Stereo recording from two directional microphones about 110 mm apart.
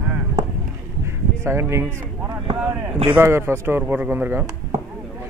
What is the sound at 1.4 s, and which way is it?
Speech, 25° right (ahead or behind).